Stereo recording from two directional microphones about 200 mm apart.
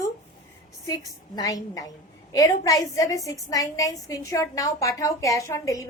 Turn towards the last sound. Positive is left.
turn(degrees=15)  # may be behind; listen again after turning